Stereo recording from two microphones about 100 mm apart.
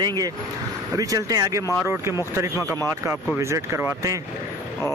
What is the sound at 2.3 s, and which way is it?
Speech, 25° right (ahead or behind).